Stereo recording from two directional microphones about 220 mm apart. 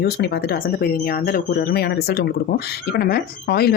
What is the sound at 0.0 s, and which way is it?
Speech, 45° left (ahead or behind).